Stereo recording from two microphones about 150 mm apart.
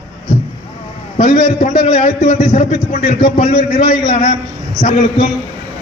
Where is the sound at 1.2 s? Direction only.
65° left (ahead or behind).